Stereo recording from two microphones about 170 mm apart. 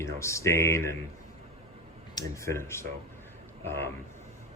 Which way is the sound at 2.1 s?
15° left (ahead or behind).